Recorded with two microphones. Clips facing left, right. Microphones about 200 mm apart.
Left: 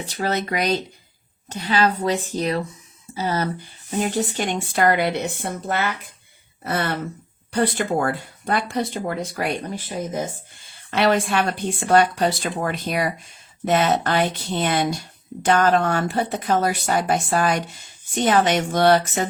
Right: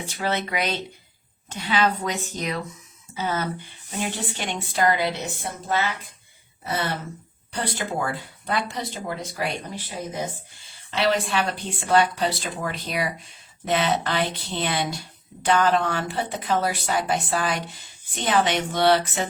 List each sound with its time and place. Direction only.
0.1 s a woman's voice: 40° left (ahead or behind)